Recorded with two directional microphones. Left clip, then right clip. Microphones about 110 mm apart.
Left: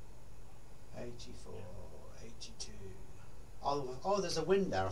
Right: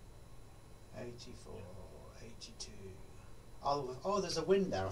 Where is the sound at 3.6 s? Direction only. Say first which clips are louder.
Even; 35° left (ahead or behind).